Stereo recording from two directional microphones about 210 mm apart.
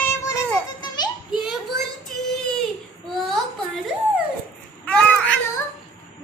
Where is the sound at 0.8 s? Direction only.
20° left (ahead or behind).